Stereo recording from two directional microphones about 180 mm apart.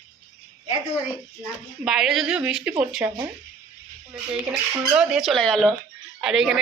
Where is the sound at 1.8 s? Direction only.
Centre (ahead or behind).